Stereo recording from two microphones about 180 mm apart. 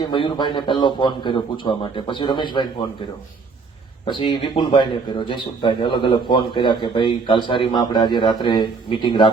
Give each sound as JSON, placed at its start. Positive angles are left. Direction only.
{"t": 0.1, "sound": "speech", "side_deg": 25}
{"t": 4.0, "sound": "speech", "side_deg": 30}